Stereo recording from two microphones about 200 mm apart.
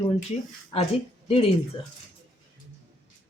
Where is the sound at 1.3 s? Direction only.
30° left (ahead or behind).